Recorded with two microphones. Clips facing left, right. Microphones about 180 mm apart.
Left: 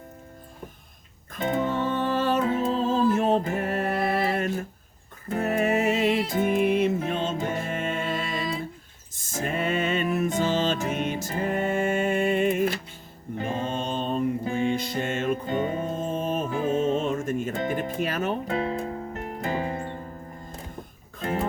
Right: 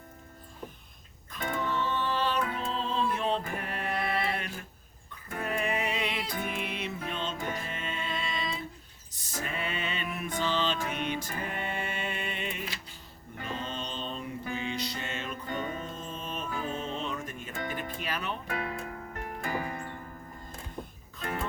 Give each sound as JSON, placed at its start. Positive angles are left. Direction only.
{"t": 1.4, "sound": "music", "side_deg": 20}
{"t": 1.6, "sound": "music", "side_deg": 50}
{"t": 13.5, "sound": "mantra", "side_deg": 50}
{"t": 14.5, "sound": "music", "side_deg": 50}
{"t": 15.4, "sound": "music", "side_deg": 25}
{"t": 15.8, "sound": "music", "side_deg": 50}
{"t": 16.5, "sound": "music", "side_deg": 25}
{"t": 16.7, "sound": "music", "side_deg": 45}
{"t": 18.4, "sound": "music", "side_deg": 25}
{"t": 21.2, "sound": "music", "side_deg": 25}